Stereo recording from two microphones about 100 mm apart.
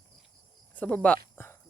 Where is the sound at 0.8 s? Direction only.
15° left (ahead or behind).